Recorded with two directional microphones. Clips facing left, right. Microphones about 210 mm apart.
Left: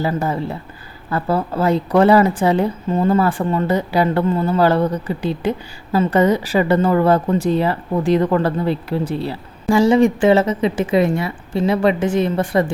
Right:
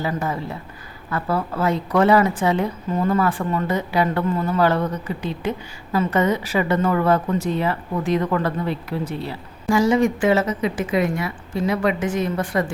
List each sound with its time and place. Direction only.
0.0 s a woman's voice: 30° left (ahead or behind)